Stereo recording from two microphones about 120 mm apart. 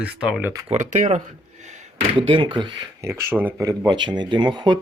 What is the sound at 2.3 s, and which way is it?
Speech, 45° right (ahead or behind).